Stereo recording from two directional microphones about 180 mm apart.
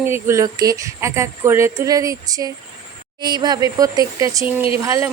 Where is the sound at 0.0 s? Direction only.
15° right (ahead or behind).